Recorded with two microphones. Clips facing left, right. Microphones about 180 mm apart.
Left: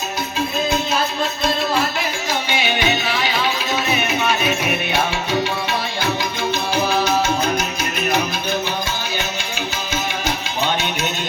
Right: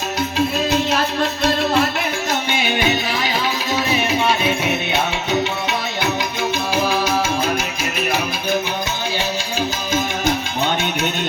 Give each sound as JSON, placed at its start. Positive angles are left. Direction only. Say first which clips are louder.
{"t": 2.6, "sound": "music", "louder": "right 1 dB", "side_deg": -45}
{"t": 3.9, "sound": "music", "louder": "right 4 dB", "side_deg": -30}
{"t": 6.8, "sound": "music", "louder": "left 2 dB", "side_deg": -10}
{"t": 9.6, "sound": "music", "louder": "right 5 dB", "side_deg": -45}